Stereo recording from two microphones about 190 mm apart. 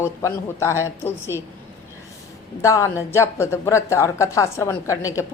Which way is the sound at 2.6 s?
15° left (ahead or behind).